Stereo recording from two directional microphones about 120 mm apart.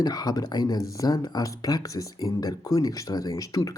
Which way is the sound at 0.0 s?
35° left (ahead or behind).